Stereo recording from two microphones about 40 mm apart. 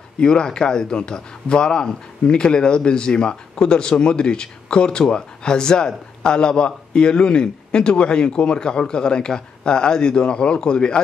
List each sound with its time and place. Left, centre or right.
0.2 s speech: centre